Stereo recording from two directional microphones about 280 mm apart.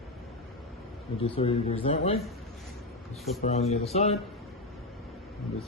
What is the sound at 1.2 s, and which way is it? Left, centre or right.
Speech, centre.